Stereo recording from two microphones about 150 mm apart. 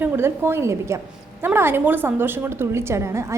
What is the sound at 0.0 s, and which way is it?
A woman's voice, 15° right (ahead or behind).